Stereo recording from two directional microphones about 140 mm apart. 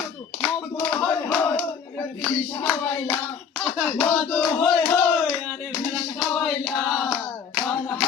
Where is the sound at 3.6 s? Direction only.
5° left (ahead or behind).